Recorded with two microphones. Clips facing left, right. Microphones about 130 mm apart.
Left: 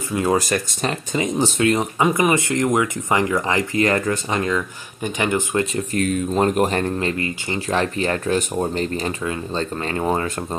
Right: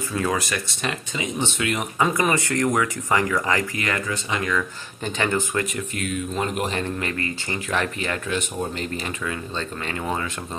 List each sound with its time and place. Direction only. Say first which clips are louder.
0.3 s speech: left 6 dB; 40° left (ahead or behind)
2.0 s speech: left 3 dB; 15° left (ahead or behind)
3.8 s speech: left 7 dB; 40° left (ahead or behind)
4.4 s speech: left 3 dB; 25° left (ahead or behind)
5.8 s speech: left 7 dB; 40° left (ahead or behind)
7.0 s speech: left 4 dB; 25° left (ahead or behind)